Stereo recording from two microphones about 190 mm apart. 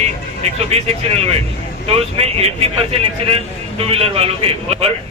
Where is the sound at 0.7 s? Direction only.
35° right (ahead or behind).